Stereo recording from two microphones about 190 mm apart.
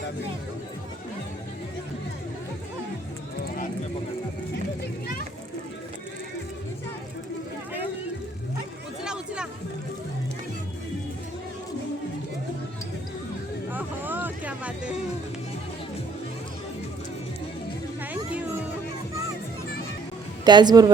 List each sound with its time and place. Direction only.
9.0 s music: 5° right (ahead or behind)
13.7 s a sound: 10° right (ahead or behind)
18.0 s music: 10° right (ahead or behind)
20.4 s a woman's voice: 20° right (ahead or behind)